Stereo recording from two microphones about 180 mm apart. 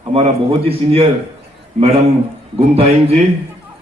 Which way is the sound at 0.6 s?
30° right (ahead or behind).